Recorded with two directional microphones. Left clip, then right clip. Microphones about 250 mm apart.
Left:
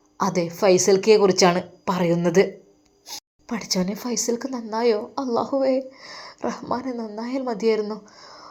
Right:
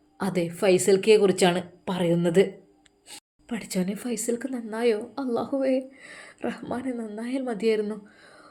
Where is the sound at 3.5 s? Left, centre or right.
Centre.